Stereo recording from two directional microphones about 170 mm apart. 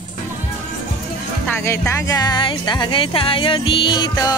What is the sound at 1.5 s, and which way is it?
Speech, 15° left (ahead or behind).